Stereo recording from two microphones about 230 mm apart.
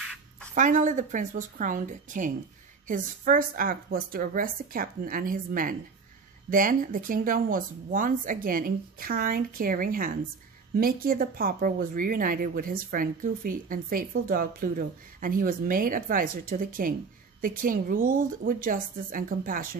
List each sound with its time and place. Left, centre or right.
0.6 s speech: right